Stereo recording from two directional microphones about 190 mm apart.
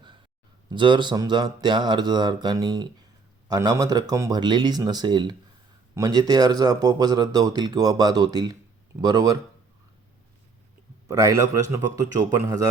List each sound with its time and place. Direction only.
0.7 s speech: 25° right (ahead or behind)
11.1 s a man's voice: 15° right (ahead or behind)